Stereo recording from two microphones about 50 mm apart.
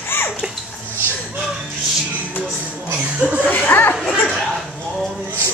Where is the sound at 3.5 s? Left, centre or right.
Left.